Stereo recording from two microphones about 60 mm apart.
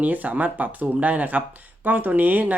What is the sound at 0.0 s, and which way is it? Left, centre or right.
Speech, right.